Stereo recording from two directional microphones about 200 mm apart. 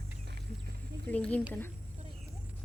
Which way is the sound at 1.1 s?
5° left (ahead or behind).